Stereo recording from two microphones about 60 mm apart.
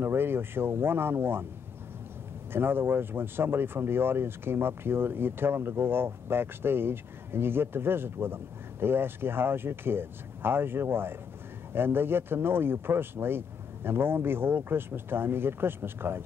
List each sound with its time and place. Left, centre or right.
0.0 s speech: right
2.5 s speech: right